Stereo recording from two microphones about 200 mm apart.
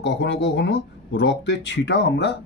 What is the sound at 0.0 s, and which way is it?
Speech, 60° left (ahead or behind).